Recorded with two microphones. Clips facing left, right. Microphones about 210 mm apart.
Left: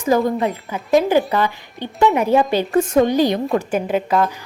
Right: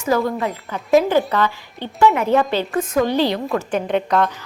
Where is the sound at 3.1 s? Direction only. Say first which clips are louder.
Left 2 dB; 15° left (ahead or behind).